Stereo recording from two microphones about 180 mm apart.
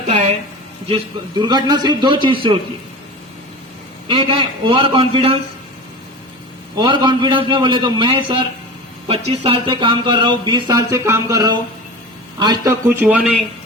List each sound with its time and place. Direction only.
0.9 s speech: 25° right (ahead or behind)
4.1 s speech: 25° right (ahead or behind)
6.7 s speech: 25° right (ahead or behind)
13.0 s speech: 10° right (ahead or behind)